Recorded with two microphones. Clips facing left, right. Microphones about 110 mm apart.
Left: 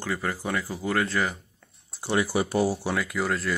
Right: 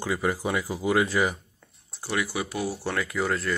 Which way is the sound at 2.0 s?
30° left (ahead or behind).